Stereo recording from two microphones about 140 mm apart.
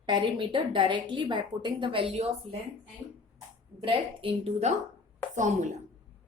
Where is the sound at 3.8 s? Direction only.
40° right (ahead or behind).